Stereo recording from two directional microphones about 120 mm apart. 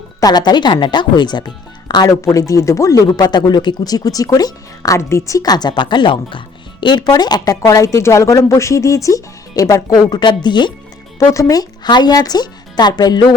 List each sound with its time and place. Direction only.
0.2 s speech: 35° left (ahead or behind)
11.2 s speech: 30° left (ahead or behind)